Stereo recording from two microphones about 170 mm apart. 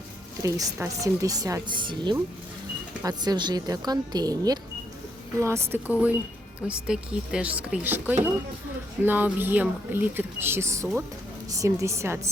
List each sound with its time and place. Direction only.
0.4 s speech: 20° right (ahead or behind)